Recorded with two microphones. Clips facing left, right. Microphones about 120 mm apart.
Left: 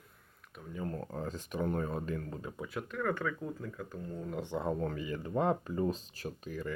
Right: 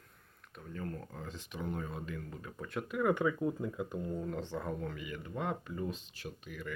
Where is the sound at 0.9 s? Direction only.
40° left (ahead or behind).